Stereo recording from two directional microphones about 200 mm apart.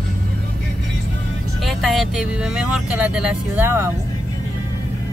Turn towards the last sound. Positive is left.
turn(degrees=-10)  # may be behind; listen again after turning